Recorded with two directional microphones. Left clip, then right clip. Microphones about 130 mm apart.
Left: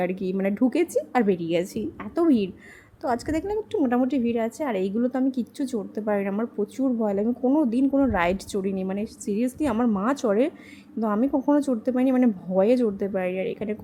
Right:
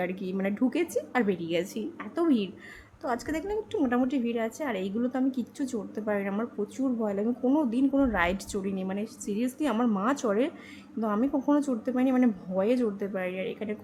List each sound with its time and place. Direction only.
0.0 s a woman's voice: 35° left (ahead or behind)
9.7 s a woman's voice: 20° left (ahead or behind)
10.1 s a woman's voice: 30° left (ahead or behind)